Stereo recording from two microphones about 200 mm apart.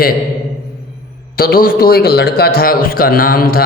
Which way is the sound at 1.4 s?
45° left (ahead or behind).